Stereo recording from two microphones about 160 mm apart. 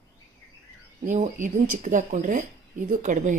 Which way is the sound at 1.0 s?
50° right (ahead or behind).